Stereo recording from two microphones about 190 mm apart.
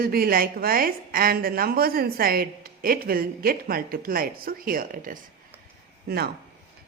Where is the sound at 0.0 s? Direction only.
50° right (ahead or behind).